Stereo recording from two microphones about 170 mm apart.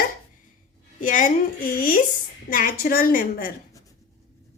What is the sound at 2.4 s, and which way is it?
A woman's voice, 55° left (ahead or behind).